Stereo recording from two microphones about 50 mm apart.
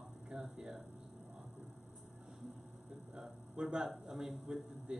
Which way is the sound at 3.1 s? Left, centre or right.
Centre.